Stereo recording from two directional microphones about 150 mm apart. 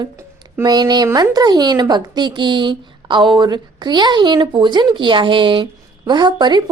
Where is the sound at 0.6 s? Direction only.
30° right (ahead or behind).